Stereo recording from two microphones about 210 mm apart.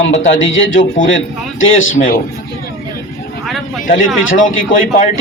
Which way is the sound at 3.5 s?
Centre (ahead or behind).